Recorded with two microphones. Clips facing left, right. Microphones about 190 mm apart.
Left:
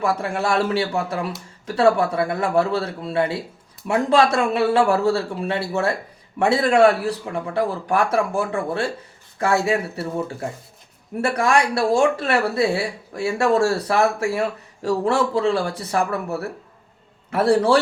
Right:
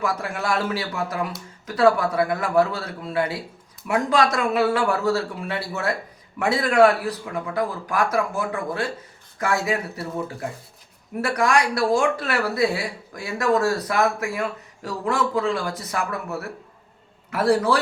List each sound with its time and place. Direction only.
0.0 s speech: 30° left (ahead or behind)
17.5 s speech: 30° left (ahead or behind)